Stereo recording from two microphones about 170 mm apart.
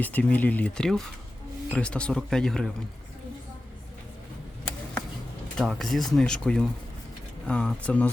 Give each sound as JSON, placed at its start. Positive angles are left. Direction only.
{"t": 0.0, "sound": "speech", "side_deg": 10}
{"t": 5.5, "sound": "speech", "side_deg": 0}